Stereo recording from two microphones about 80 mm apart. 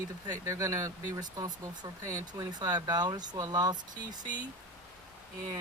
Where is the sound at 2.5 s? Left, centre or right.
Right.